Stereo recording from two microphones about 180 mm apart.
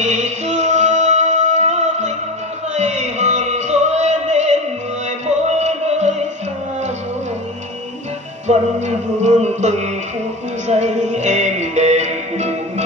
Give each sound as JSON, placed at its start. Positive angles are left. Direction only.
{"t": 0.0, "sound": "music", "side_deg": -40}
{"t": 8.5, "sound": "music", "side_deg": -40}